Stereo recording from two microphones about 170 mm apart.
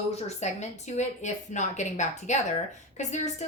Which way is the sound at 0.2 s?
40° left (ahead or behind).